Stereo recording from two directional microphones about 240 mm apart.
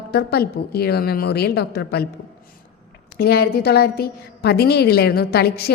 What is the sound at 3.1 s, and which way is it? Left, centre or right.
A woman's voice, left.